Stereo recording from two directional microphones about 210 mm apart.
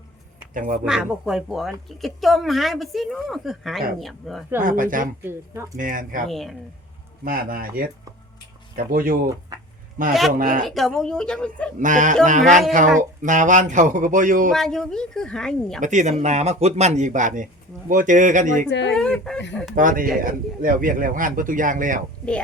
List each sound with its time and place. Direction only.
0.5 s speech: 40° right (ahead or behind)
0.9 s a woman's voice: centre (ahead or behind)
4.8 s speech: 40° right (ahead or behind)
6.2 s a woman's voice: centre (ahead or behind)
7.3 s speech: 45° right (ahead or behind)
10.1 s a woman's voice: centre (ahead or behind)
10.3 s speech: 40° right (ahead or behind)
10.7 s a woman's voice: centre (ahead or behind)
11.8 s speech: 35° right (ahead or behind)
14.5 s a woman's voice: centre (ahead or behind)
15.8 s speech: 35° right (ahead or behind)
18.7 s speech: 60° left (ahead or behind)
18.9 s a woman's voice: 5° left (ahead or behind)
19.7 s speech: 40° right (ahead or behind)